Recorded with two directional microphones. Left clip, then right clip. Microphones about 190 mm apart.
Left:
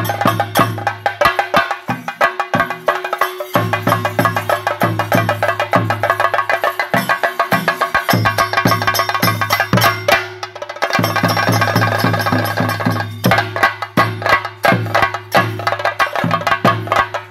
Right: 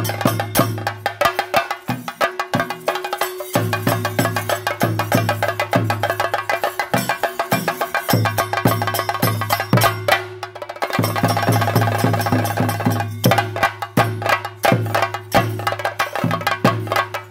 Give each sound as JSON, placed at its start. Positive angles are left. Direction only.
{"t": 0.0, "sound": "music", "side_deg": -50}
{"t": 0.8, "sound": "music", "side_deg": -35}
{"t": 1.9, "sound": "music", "side_deg": -55}
{"t": 2.9, "sound": "music", "side_deg": -35}
{"t": 4.0, "sound": "music", "side_deg": -50}
{"t": 4.7, "sound": "music", "side_deg": -35}